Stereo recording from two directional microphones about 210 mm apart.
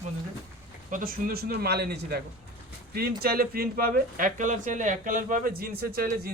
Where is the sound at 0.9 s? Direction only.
40° right (ahead or behind).